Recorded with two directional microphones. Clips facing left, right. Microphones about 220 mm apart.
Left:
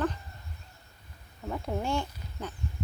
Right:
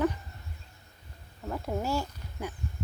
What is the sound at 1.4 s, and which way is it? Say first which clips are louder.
Speech: even; 5° right (ahead or behind).